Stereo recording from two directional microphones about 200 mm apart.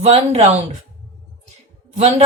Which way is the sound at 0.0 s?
30° right (ahead or behind).